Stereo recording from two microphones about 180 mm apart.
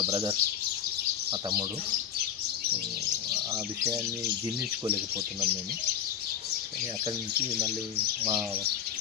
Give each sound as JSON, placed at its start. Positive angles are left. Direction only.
{"t": 0.0, "sound": "speech", "side_deg": -30}
{"t": 3.5, "sound": "speech", "side_deg": -15}
{"t": 8.2, "sound": "speech", "side_deg": -15}